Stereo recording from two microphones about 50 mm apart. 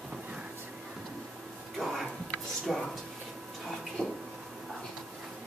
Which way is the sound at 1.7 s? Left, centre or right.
Centre.